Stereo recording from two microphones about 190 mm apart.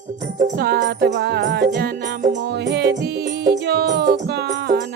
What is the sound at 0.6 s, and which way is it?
Music, 55° right (ahead or behind).